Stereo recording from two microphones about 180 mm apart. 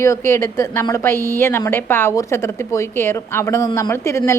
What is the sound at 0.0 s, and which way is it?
A woman's voice, 15° left (ahead or behind).